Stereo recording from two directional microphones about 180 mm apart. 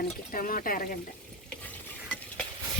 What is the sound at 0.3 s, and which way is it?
Speech, 50° left (ahead or behind).